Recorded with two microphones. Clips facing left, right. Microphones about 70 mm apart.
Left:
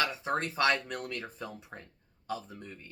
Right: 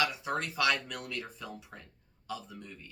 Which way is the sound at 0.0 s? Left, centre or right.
Left.